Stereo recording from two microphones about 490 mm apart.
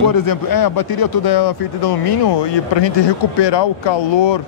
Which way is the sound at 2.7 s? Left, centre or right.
Left.